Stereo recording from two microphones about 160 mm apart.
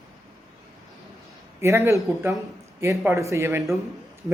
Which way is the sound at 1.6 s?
20° right (ahead or behind).